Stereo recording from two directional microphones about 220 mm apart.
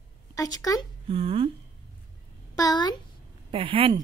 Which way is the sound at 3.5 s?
25° right (ahead or behind).